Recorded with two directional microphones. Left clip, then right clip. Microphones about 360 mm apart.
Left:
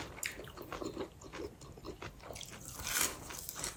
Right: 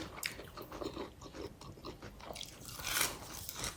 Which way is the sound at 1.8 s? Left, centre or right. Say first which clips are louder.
Left 1 dB; centre.